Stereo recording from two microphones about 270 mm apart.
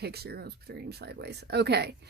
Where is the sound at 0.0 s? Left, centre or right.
Right.